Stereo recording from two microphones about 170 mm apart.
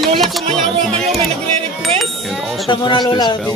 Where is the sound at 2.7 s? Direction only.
25° left (ahead or behind).